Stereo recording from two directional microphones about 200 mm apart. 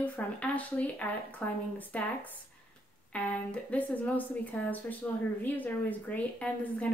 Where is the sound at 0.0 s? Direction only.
5° left (ahead or behind).